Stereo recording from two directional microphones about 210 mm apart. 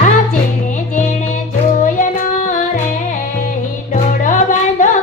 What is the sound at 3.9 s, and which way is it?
Music, 35° left (ahead or behind).